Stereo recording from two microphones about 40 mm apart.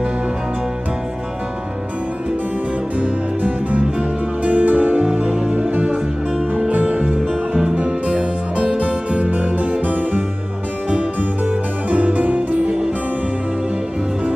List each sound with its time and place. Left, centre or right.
3.0 s music: right
5.0 s music: centre
5.5 s music: right
10.9 s music: right